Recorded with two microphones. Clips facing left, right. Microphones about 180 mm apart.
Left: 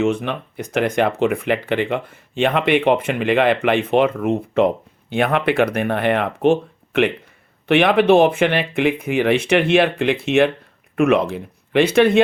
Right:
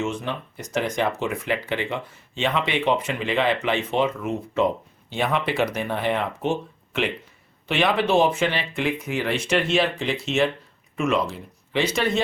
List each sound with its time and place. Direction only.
0.0 s speech: 60° left (ahead or behind)